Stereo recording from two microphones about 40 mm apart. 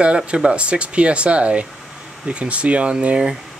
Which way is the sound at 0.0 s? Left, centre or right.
Right.